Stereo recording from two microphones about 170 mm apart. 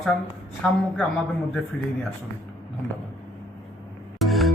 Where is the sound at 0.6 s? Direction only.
5° left (ahead or behind).